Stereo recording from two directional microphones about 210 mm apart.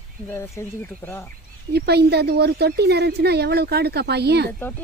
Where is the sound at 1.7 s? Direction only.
50° right (ahead or behind).